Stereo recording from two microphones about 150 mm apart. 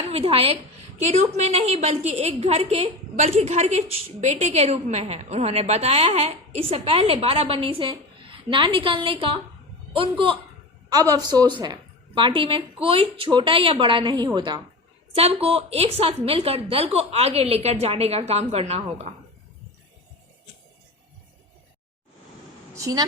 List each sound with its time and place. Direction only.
0.1 s a woman's voice: 40° right (ahead or behind)
10.8 s a woman's voice: 25° right (ahead or behind)
15.1 s a woman's voice: 40° right (ahead or behind)
22.7 s a woman's voice: 25° right (ahead or behind)